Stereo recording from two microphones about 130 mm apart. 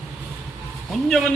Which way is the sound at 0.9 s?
Centre (ahead or behind).